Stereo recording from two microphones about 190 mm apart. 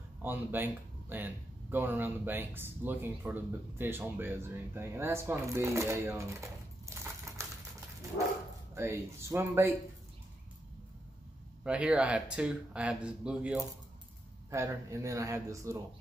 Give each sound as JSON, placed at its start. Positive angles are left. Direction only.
{"t": 0.2, "sound": "speech", "side_deg": -10}
{"t": 8.7, "sound": "speech", "side_deg": -15}
{"t": 11.6, "sound": "speech", "side_deg": -5}
{"t": 14.5, "sound": "speech", "side_deg": -15}